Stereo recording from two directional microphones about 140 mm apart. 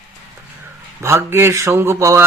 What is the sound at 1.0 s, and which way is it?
A man's voice, 20° right (ahead or behind).